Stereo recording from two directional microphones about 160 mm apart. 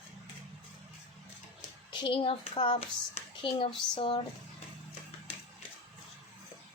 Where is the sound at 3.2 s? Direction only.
35° left (ahead or behind).